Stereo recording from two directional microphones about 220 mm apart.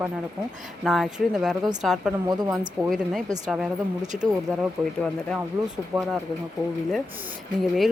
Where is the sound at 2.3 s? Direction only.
15° right (ahead or behind).